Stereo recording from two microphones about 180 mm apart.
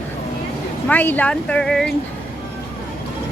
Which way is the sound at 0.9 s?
10° left (ahead or behind).